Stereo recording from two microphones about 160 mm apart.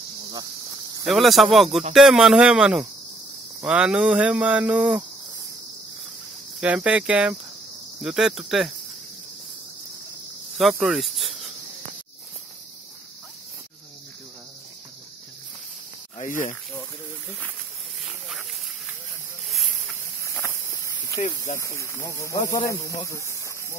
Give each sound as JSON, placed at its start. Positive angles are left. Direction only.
{"t": 1.0, "sound": "speech", "side_deg": 0}
{"t": 6.6, "sound": "speech", "side_deg": -10}
{"t": 10.6, "sound": "cricket", "side_deg": -5}
{"t": 16.2, "sound": "speech", "side_deg": 50}
{"t": 19.5, "sound": "a sound", "side_deg": 0}
{"t": 20.2, "sound": "snake", "side_deg": 15}
{"t": 21.5, "sound": "speech", "side_deg": 20}